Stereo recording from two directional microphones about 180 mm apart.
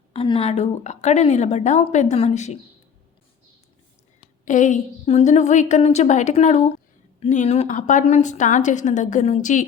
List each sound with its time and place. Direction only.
0.1 s a woman's voice: 30° left (ahead or behind)
4.4 s a woman's voice: 45° left (ahead or behind)